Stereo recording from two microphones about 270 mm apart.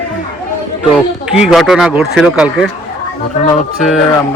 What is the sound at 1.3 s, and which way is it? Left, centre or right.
Speech, centre.